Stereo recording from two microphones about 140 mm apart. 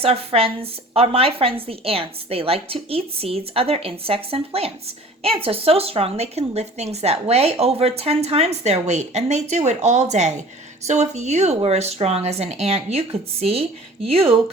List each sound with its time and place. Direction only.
0.0 s a woman's voice: 45° right (ahead or behind)